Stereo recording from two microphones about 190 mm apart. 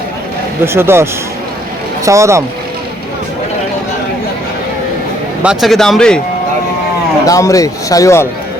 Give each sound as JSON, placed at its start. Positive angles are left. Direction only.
{"t": 0.6, "sound": "speech", "side_deg": -10}
{"t": 2.0, "sound": "speech", "side_deg": -15}
{"t": 5.4, "sound": "speech", "side_deg": -5}
{"t": 7.3, "sound": "speech", "side_deg": 15}